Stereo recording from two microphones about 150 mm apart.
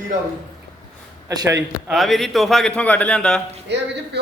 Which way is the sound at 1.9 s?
Centre (ahead or behind).